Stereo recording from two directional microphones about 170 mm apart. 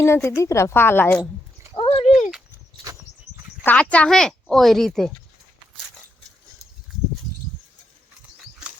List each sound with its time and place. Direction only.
0.0 s a woman's voice: 15° left (ahead or behind)
1.7 s a sound: 30° left (ahead or behind)
3.6 s speech: 10° left (ahead or behind)